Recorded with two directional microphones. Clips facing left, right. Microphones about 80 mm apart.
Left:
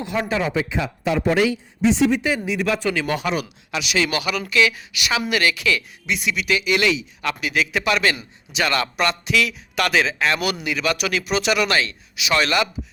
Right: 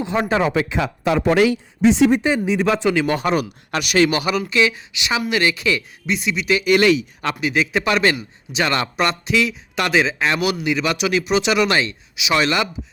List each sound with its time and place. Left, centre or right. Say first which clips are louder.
0.0 s speech: right 4 dB; right
0.5 s speech: right 3 dB; right
2.2 s a man's voice: right 4 dB; right
3.2 s speech: right 4 dB; right
4.2 s a man's voice: right 2 dB; right